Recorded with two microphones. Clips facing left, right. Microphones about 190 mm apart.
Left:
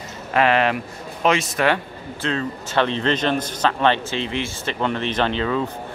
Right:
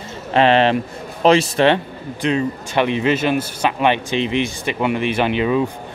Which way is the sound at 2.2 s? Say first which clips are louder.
Right 6 dB; 15° right (ahead or behind).